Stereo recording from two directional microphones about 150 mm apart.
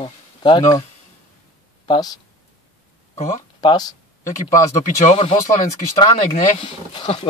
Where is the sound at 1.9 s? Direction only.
25° left (ahead or behind).